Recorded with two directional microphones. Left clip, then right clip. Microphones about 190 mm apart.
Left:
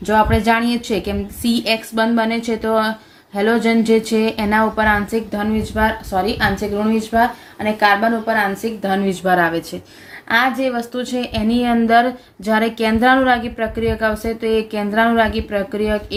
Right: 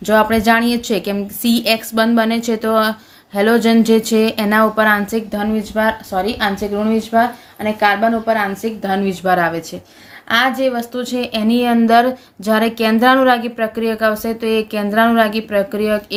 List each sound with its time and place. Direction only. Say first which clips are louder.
0.0 s speech: right 2 dB; 40° right (ahead or behind)